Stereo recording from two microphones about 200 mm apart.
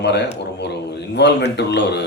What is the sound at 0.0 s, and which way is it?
A man's voice, 60° left (ahead or behind).